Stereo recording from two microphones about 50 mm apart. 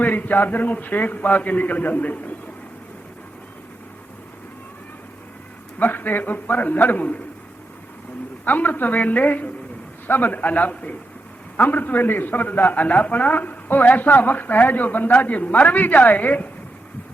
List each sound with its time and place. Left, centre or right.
0.0 s a man's voice: left
5.8 s a man's voice: left
8.4 s a man's voice: left